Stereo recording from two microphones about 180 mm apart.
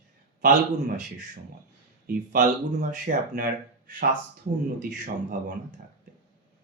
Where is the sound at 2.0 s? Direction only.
50° right (ahead or behind).